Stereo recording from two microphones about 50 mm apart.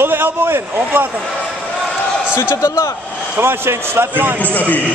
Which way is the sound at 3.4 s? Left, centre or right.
Right.